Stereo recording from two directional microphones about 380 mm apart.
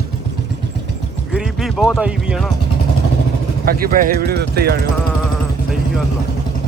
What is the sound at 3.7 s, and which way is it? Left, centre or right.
Speech, right.